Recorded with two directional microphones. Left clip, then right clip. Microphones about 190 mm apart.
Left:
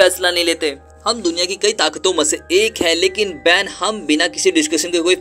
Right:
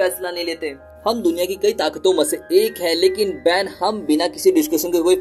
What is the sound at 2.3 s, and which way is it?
Speech, 10° left (ahead or behind).